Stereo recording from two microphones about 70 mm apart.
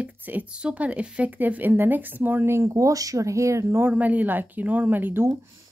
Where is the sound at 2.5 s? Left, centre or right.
Right.